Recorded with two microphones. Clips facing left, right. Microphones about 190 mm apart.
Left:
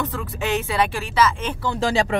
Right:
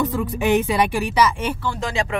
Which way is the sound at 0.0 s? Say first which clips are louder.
Right 5 dB; 15° right (ahead or behind).